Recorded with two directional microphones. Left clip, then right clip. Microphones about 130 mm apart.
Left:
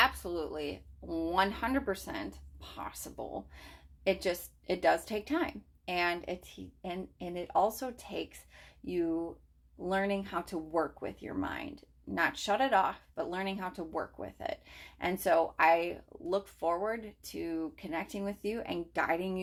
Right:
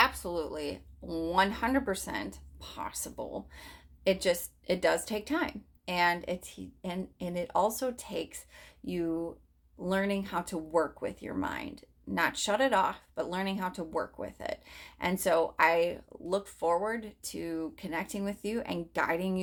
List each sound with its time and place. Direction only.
0.0 s speech: 30° right (ahead or behind)
1.0 s speech: 45° right (ahead or behind)
1.5 s speech: 30° right (ahead or behind)